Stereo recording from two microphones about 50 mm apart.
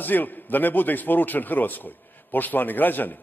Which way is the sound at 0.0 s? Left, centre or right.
Left.